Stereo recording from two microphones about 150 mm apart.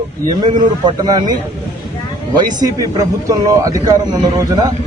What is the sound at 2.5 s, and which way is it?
Speech, 25° right (ahead or behind).